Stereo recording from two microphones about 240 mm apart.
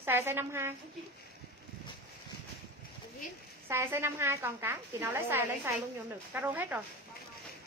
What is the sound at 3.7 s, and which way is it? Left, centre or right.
A woman's voice, centre.